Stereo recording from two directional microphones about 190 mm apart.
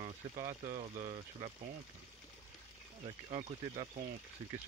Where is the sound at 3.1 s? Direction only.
35° right (ahead or behind).